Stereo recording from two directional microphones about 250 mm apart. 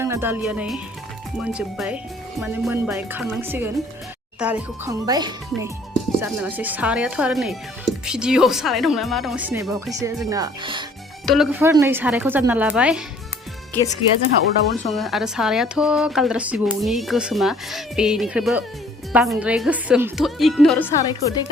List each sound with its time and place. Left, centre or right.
0.0 s speech: centre
11.3 s speech: centre
14.7 s speech: centre